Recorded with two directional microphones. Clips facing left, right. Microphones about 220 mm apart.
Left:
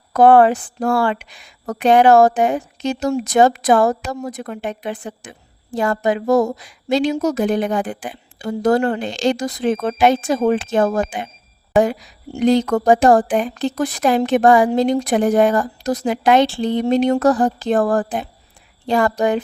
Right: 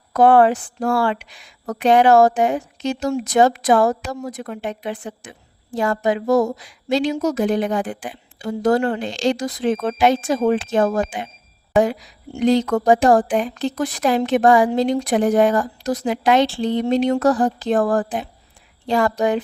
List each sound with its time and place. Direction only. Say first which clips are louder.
0.1 s a woman's voice: left 2 dB; 50° left (ahead or behind)